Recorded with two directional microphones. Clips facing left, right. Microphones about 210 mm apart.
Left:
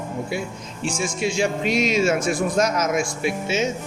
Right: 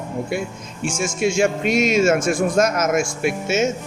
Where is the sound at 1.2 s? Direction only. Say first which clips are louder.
Right 4 dB; 50° right (ahead or behind).